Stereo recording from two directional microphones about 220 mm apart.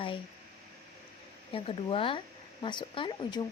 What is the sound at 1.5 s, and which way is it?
Speech, 25° left (ahead or behind).